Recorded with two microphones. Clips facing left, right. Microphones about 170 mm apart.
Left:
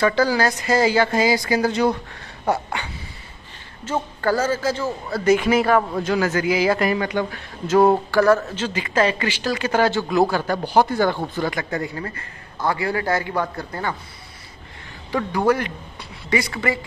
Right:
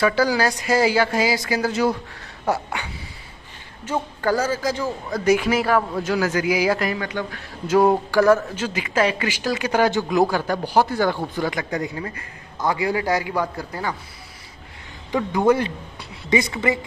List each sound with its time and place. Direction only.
0.0 s speech: 10° right (ahead or behind)
15.0 s speech: 20° right (ahead or behind)